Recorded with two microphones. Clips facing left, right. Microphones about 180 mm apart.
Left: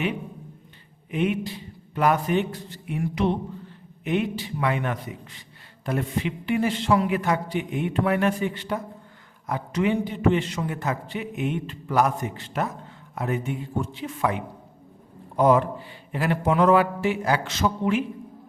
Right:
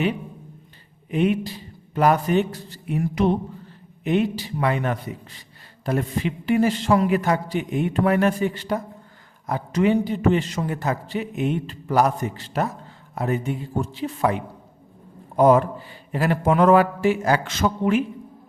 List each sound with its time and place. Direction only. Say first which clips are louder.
1.1 s a man's voice: right 4 dB; 35° right (ahead or behind); by 18.0 s 55° right (ahead or behind)